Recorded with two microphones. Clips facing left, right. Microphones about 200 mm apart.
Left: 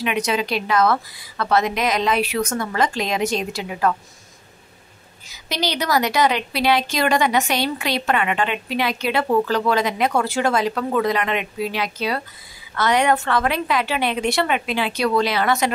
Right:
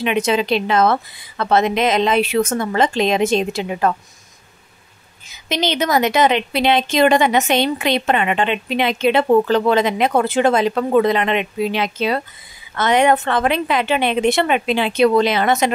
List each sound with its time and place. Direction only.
0.0 s a woman's voice: 25° right (ahead or behind)
5.3 s a woman's voice: 20° right (ahead or behind)